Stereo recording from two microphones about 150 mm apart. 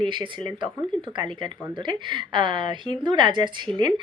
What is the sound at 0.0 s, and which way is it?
A woman's voice, 30° right (ahead or behind).